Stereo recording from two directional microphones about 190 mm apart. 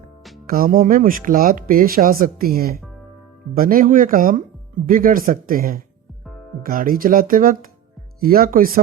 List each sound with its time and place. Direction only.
0.4 s speech: 50° right (ahead or behind)